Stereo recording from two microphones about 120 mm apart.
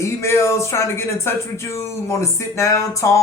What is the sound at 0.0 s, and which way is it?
Speech, 25° left (ahead or behind).